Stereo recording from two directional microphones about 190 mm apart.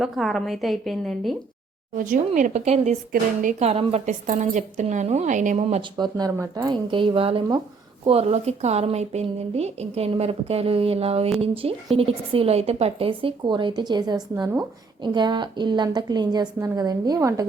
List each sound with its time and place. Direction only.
0.0 s a woman's voice: centre (ahead or behind)
2.0 s a woman's voice: 45° right (ahead or behind)
6.0 s a woman's voice: 20° right (ahead or behind)